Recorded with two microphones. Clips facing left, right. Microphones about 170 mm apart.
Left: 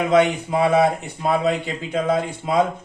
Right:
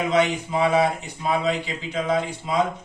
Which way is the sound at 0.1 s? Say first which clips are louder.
Left 6 dB; 55° left (ahead or behind).